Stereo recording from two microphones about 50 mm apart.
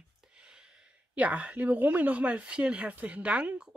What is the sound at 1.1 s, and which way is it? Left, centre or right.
Speech, right.